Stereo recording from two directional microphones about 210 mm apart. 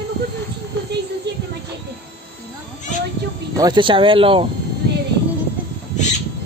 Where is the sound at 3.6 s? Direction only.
20° right (ahead or behind).